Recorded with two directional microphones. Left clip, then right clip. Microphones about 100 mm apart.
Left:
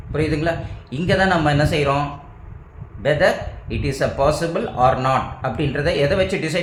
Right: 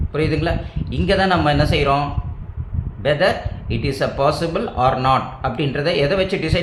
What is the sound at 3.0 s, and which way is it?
Speech, 15° right (ahead or behind).